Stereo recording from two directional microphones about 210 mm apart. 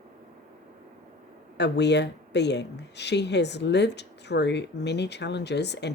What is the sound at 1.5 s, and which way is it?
Speech, 55° left (ahead or behind).